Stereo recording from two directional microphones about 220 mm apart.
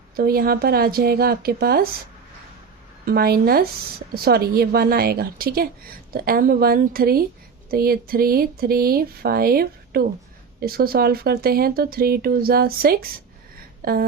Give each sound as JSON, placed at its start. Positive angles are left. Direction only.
{"t": 0.2, "sound": "speech", "side_deg": -45}
{"t": 3.1, "sound": "speech", "side_deg": -45}